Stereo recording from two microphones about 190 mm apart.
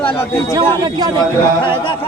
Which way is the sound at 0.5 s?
20° right (ahead or behind).